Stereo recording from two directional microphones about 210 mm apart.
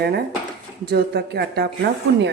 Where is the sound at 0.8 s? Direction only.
50° right (ahead or behind).